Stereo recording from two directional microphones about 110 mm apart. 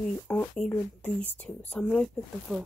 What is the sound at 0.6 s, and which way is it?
Speech, 10° left (ahead or behind).